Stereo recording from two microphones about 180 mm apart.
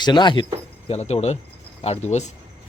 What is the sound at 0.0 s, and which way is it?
Speech, 25° left (ahead or behind).